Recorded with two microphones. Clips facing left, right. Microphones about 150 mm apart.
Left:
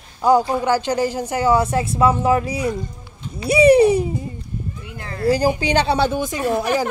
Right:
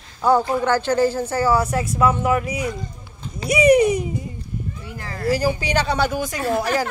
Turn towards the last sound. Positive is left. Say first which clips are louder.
# left 2 dB
turn(degrees=20)  # may be behind; listen again after turning